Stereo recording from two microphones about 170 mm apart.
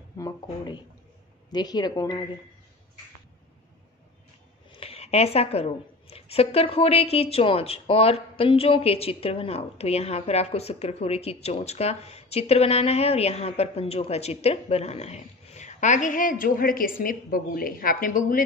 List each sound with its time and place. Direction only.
0.2 s a woman's voice: 20° left (ahead or behind)
1.5 s a woman's voice: 25° left (ahead or behind)
4.6 s a woman's voice: 35° left (ahead or behind); by 18.4 s 55° left (ahead or behind)